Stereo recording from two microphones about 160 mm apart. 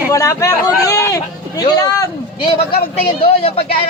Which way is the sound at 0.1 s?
20° left (ahead or behind).